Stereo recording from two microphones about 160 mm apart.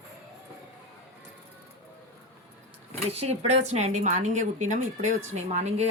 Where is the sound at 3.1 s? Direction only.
40° right (ahead or behind).